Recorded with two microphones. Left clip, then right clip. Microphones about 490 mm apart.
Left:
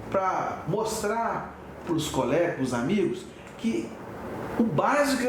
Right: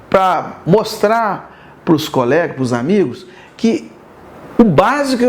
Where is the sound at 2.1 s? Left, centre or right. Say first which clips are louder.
Right 11 dB; right.